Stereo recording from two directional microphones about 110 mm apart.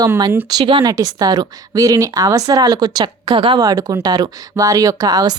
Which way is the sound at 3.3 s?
55° right (ahead or behind).